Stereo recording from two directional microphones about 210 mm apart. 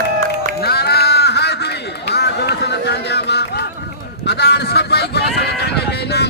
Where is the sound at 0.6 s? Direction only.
50° left (ahead or behind).